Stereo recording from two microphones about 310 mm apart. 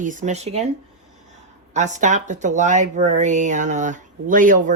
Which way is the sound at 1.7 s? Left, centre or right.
Right.